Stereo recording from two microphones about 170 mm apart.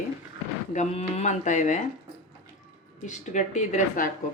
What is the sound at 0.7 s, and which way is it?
Speech, 40° left (ahead or behind).